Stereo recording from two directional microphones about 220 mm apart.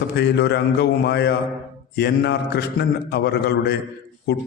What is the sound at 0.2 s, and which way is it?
A man's voice, 50° left (ahead or behind).